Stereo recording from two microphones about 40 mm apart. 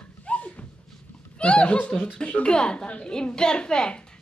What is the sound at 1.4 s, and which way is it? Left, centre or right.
A woman's voice, left.